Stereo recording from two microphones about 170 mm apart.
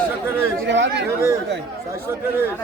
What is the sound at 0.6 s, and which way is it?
Speech, 90° right.